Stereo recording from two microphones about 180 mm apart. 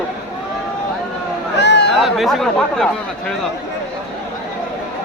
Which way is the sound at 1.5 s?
75° left (ahead or behind).